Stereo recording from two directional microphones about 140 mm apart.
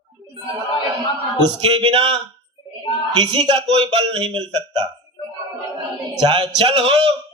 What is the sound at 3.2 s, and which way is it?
Speech, 35° right (ahead or behind).